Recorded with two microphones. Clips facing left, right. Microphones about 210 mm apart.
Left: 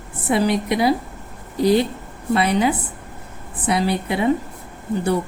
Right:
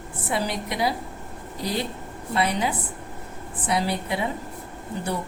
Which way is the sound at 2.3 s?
65° left (ahead or behind).